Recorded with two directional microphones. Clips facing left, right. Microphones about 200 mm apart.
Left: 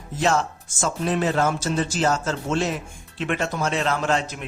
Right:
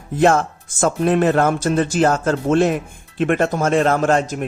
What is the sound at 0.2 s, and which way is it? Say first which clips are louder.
Speech: right 7 dB; 55° right (ahead or behind).